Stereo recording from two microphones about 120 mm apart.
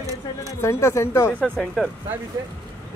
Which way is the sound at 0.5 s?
25° left (ahead or behind).